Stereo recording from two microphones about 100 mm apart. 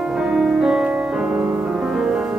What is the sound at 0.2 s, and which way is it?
Music, 5° right (ahead or behind).